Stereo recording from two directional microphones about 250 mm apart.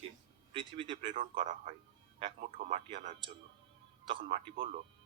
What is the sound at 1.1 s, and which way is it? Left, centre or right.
A man's voice, right.